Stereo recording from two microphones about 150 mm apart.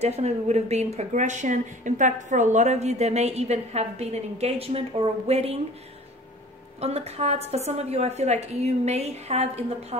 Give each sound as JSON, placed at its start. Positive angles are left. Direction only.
{"t": 0.0, "sound": "speech", "side_deg": -45}
{"t": 6.8, "sound": "speech", "side_deg": -45}